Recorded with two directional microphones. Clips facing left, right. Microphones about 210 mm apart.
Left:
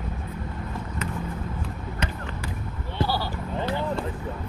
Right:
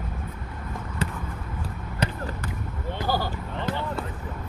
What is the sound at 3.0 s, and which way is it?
Basketball bounce, 45° right (ahead or behind).